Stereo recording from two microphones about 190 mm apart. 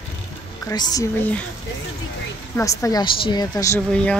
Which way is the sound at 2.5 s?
15° left (ahead or behind).